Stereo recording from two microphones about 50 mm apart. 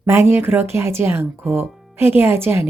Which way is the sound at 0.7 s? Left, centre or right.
Right.